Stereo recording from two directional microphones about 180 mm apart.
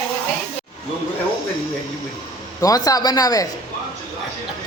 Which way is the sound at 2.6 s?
20° left (ahead or behind).